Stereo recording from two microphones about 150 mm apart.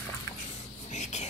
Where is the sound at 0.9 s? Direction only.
50° left (ahead or behind).